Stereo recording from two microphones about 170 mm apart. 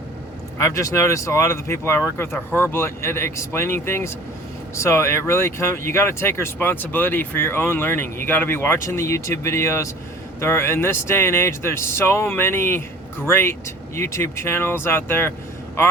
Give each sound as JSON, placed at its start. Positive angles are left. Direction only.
{"t": 0.6, "sound": "speech", "side_deg": 20}